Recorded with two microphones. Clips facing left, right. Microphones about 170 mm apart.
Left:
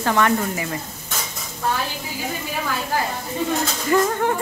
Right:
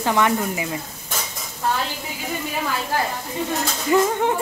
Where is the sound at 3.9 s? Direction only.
15° right (ahead or behind).